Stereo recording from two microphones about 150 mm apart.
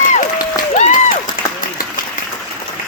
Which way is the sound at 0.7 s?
60° left (ahead or behind).